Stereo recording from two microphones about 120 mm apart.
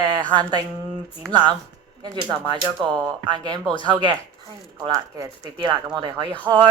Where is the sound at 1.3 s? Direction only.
35° right (ahead or behind).